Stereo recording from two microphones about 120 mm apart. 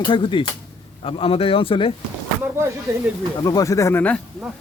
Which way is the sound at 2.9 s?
25° right (ahead or behind).